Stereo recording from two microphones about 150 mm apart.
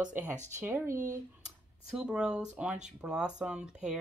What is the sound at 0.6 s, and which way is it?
Speech, 15° right (ahead or behind).